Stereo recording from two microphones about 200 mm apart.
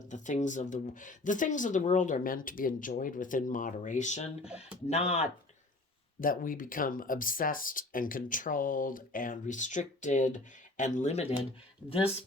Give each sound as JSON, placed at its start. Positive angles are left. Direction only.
{"t": 0.1, "sound": "speech", "side_deg": 35}
{"t": 4.4, "sound": "speech", "side_deg": -5}
{"t": 4.9, "sound": "speech", "side_deg": 30}
{"t": 6.1, "sound": "speech", "side_deg": 45}